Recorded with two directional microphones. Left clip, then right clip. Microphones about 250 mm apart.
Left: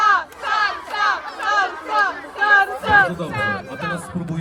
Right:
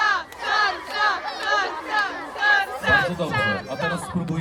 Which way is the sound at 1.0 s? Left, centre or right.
Centre.